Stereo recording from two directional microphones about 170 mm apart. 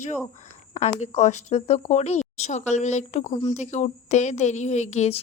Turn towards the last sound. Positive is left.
turn(degrees=40)  # may be behind; listen again after turning